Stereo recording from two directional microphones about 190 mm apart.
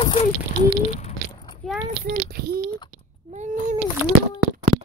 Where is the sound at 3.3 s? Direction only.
40° right (ahead or behind).